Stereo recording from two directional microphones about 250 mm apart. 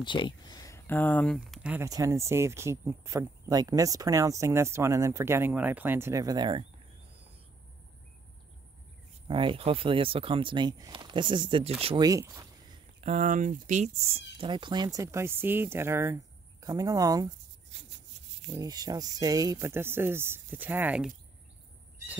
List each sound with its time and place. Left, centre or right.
0.0 s speech: centre
9.3 s speech: right
13.0 s speech: right; by 17.3 s centre
17.6 s a sound: right
18.5 s speech: centre